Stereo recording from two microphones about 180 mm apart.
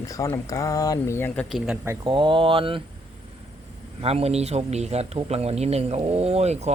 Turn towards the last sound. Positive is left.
turn(degrees=-35)  # may be behind; listen again after turning